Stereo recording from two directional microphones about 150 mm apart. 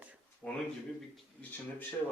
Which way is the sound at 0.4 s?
5° left (ahead or behind).